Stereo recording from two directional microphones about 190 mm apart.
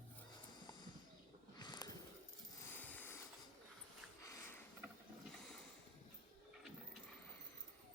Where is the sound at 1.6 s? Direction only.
20° left (ahead or behind).